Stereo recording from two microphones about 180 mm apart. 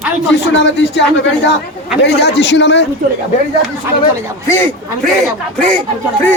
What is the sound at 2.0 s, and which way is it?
Speech, 75° left (ahead or behind).